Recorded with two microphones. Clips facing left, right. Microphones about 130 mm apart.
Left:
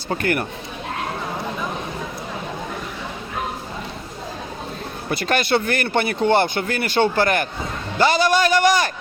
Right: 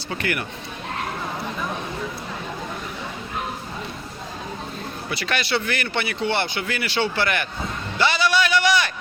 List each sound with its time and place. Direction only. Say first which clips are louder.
0.1 s speech: left 5 dB; 45° left (ahead or behind)
5.0 s speech: left 6 dB; 45° left (ahead or behind)